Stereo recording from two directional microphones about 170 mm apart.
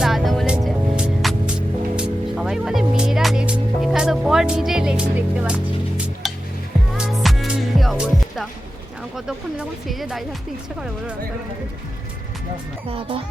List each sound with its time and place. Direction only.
0.0 s music: centre (ahead or behind)
9.1 s speech: 5° right (ahead or behind)
12.9 s speech: 30° right (ahead or behind)